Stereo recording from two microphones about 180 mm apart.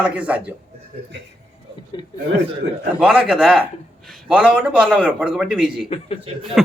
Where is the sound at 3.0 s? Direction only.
5° right (ahead or behind).